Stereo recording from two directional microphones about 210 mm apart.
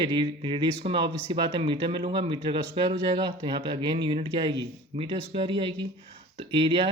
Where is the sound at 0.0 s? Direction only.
20° right (ahead or behind).